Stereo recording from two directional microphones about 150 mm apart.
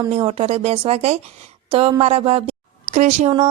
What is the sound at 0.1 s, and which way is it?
A woman's voice, 40° right (ahead or behind).